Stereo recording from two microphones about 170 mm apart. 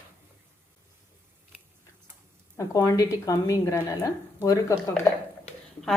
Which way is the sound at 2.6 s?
20° left (ahead or behind).